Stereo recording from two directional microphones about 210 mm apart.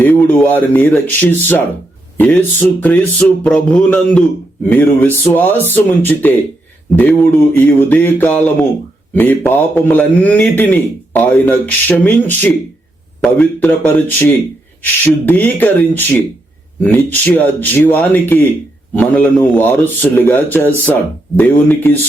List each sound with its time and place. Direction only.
0.0 s a man's voice: 10° left (ahead or behind)